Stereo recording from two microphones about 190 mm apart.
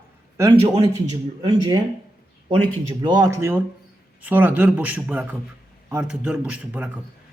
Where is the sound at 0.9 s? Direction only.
20° right (ahead or behind).